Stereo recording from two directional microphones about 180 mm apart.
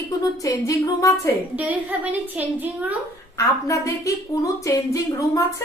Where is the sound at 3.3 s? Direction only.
15° left (ahead or behind).